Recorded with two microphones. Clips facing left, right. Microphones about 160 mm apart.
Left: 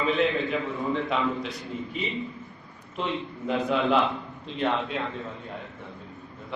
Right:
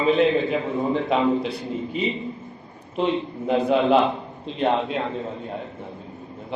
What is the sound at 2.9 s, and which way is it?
A man's voice, 25° right (ahead or behind).